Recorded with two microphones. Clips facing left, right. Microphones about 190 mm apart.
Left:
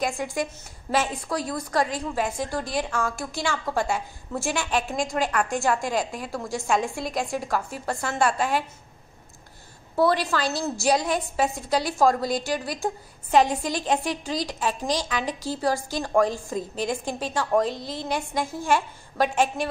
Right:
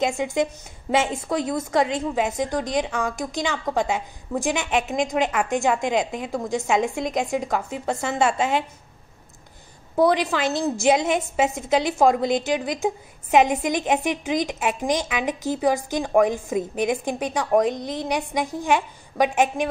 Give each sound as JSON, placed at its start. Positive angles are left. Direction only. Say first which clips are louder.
{"t": 0.2, "sound": "a woman's voice", "louder": "right 5 dB", "side_deg": -20}
{"t": 9.9, "sound": "a woman's voice", "louder": "right 3 dB", "side_deg": -20}